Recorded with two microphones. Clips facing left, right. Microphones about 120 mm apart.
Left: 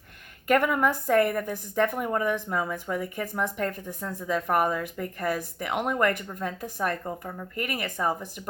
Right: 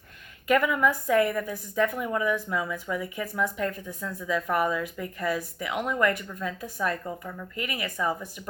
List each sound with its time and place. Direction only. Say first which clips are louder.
0.4 s a woman's voice: even; 50° left (ahead or behind)
7.0 s speech: left 1 dB; 35° left (ahead or behind)
7.5 s a woman's voice: left 2 dB; 50° left (ahead or behind)